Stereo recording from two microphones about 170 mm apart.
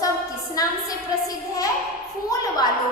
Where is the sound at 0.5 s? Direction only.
20° left (ahead or behind).